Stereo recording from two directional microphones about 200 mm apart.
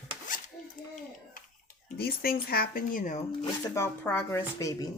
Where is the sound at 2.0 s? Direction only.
50° left (ahead or behind).